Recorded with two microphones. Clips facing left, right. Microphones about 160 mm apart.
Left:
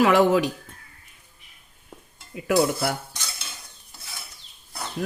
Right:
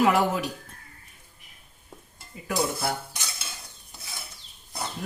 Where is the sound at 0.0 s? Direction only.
90° left.